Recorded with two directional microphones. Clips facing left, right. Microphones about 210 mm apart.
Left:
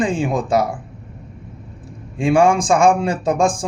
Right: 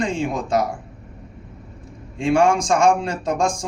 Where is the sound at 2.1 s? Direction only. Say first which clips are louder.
Left 3 dB; 5° left (ahead or behind).